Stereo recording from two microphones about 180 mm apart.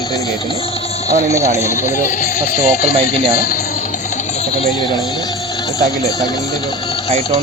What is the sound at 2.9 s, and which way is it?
Speech, 30° right (ahead or behind).